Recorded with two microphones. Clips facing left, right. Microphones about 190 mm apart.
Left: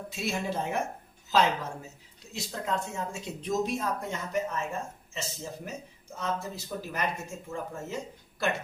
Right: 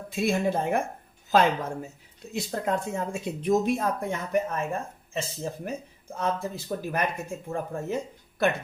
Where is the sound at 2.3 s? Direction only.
55° right (ahead or behind).